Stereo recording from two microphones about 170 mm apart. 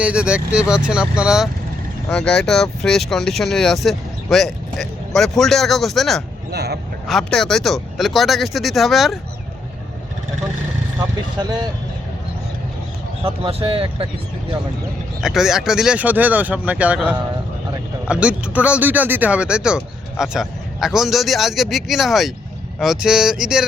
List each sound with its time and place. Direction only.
0.0 s speech: 5° right (ahead or behind)
6.5 s a man's voice: 70° right (ahead or behind)
7.1 s speech: 5° left (ahead or behind)
13.2 s speech: 35° right (ahead or behind)
15.2 s speech: 5° right (ahead or behind)